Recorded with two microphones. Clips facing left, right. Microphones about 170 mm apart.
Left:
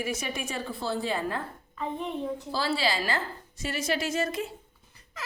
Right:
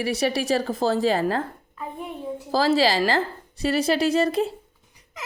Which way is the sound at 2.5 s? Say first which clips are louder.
Right 10 dB; 90° right.